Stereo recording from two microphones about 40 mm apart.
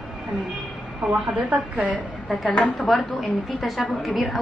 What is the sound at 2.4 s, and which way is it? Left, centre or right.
Speech, left.